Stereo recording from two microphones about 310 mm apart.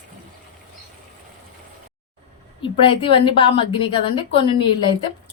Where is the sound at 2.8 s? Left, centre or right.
Centre.